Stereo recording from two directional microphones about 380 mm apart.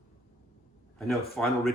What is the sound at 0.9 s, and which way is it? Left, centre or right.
Speech, centre.